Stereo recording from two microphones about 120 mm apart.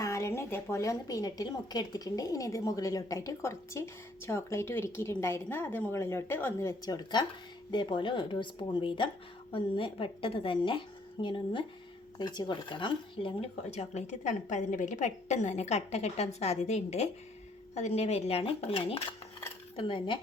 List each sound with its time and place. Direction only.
0.0 s a woman's voice: 25° left (ahead or behind); by 13.5 s 40° left (ahead or behind)
13.7 s a woman's voice: 70° left (ahead or behind); by 20.1 s 45° left (ahead or behind)